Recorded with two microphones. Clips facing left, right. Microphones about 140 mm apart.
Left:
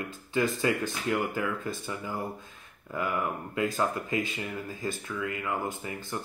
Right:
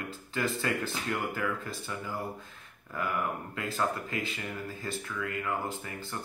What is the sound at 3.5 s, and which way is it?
Speech, 20° left (ahead or behind).